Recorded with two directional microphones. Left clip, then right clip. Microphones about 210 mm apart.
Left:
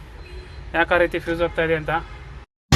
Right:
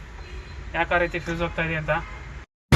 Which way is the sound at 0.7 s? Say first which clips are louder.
Left 5 dB; 35° left (ahead or behind).